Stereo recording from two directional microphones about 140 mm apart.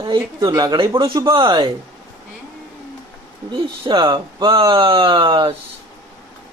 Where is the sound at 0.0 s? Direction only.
30° right (ahead or behind).